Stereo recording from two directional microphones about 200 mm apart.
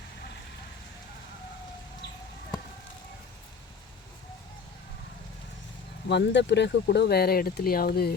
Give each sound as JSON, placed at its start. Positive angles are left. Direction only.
{"t": 6.1, "sound": "speech", "side_deg": 60}